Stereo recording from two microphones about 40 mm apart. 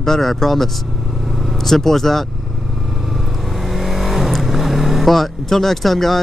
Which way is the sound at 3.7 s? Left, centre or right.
Centre.